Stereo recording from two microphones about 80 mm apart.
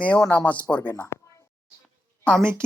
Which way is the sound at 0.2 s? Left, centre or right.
Left.